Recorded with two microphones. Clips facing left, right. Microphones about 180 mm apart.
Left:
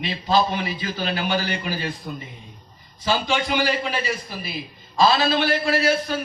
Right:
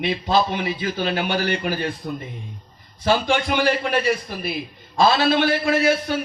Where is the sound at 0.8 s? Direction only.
55° right (ahead or behind).